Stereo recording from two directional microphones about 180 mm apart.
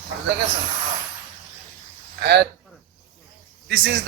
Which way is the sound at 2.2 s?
65° right (ahead or behind).